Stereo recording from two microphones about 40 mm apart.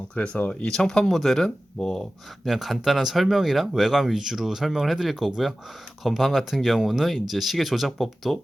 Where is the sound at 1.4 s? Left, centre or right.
Centre.